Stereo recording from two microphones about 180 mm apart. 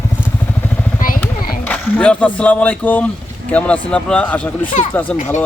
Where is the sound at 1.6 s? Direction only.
10° left (ahead or behind).